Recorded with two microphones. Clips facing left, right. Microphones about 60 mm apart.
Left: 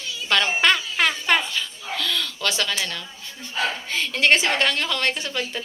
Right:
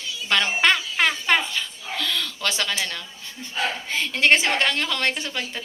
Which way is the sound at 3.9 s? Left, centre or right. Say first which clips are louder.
Right 1 dB; centre.